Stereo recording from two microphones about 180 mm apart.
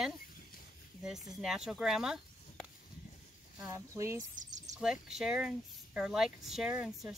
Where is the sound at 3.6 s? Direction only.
15° right (ahead or behind).